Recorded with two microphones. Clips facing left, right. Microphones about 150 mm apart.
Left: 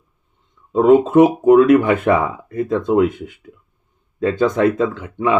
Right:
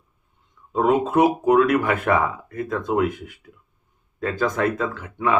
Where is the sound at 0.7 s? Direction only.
25° left (ahead or behind).